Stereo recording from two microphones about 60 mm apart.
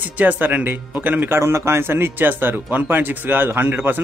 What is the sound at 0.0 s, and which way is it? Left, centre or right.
A man's voice, right.